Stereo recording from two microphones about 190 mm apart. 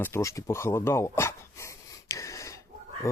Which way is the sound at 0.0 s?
15° left (ahead or behind).